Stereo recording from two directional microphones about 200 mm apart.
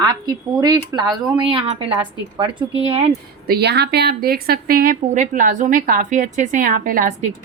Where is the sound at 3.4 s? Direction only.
55° right (ahead or behind).